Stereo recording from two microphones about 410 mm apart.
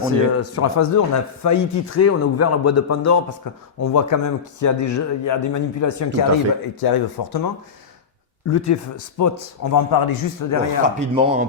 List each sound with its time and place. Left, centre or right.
0.0 s a man's voice: left
6.8 s speech: left
8.4 s a man's voice: left
10.8 s speech: centre